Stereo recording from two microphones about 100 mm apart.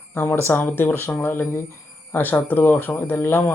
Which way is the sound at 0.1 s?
25° left (ahead or behind).